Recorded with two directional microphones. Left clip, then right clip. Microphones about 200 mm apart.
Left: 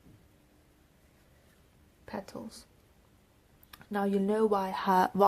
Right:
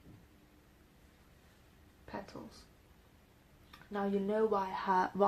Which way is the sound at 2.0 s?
45° left (ahead or behind).